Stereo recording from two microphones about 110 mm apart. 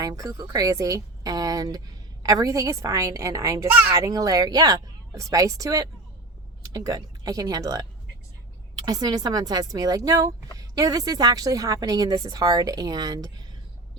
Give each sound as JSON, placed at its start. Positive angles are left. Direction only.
{"t": 0.0, "sound": "speech", "side_deg": -30}
{"t": 8.9, "sound": "speech", "side_deg": -35}